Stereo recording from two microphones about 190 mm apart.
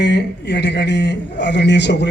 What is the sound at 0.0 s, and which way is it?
A man's voice, 65° left (ahead or behind).